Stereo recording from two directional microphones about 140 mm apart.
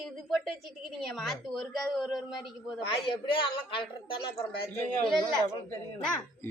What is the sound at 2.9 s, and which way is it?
A woman's voice, 40° left (ahead or behind).